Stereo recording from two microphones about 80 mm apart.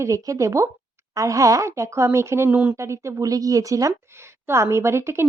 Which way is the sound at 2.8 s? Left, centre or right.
Right.